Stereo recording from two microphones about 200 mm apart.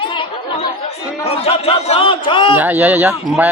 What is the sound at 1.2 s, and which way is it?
Speech, 30° left (ahead or behind).